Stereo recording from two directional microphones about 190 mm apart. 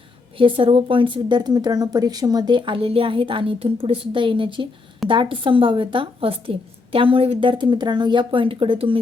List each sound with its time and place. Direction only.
0.3 s a woman's voice: 25° right (ahead or behind)